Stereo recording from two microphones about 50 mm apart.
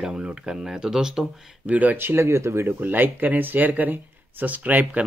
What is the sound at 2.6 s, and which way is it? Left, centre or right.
Speech, right.